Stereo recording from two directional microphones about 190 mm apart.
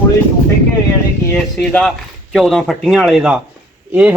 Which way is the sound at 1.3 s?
5° left (ahead or behind).